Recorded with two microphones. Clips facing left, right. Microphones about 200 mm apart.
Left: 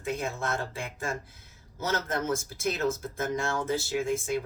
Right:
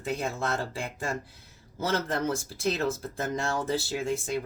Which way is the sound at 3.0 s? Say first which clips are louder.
Even; 35° right (ahead or behind).